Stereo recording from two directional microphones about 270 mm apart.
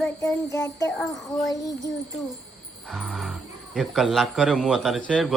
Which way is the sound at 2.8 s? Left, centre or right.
Centre.